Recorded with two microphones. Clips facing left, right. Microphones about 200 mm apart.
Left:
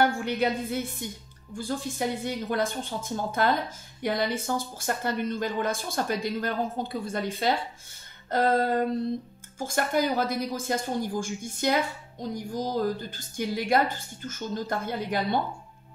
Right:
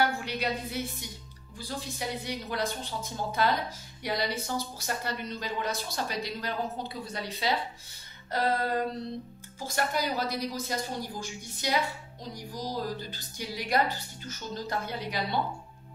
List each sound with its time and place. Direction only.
0.0 s a woman's voice: 50° left (ahead or behind)